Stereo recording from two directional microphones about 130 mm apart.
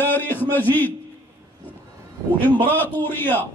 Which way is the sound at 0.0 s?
15° left (ahead or behind).